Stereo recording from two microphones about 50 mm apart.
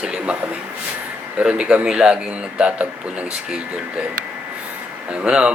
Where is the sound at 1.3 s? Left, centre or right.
Centre.